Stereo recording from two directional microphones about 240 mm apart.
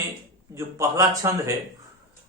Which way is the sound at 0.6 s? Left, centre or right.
Centre.